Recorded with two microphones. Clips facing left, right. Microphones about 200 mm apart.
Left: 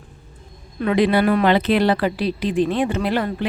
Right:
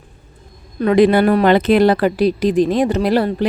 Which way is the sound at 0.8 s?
45° right (ahead or behind).